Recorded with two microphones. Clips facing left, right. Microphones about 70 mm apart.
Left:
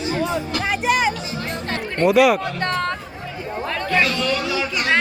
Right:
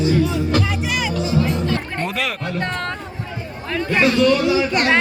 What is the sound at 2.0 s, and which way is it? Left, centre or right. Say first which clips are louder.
Speech: left 15 dB; centre.